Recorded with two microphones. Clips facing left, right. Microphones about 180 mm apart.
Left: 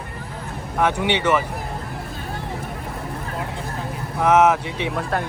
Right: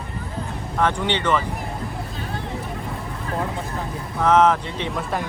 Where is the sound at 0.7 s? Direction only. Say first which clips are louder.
Left 1 dB; 10° left (ahead or behind).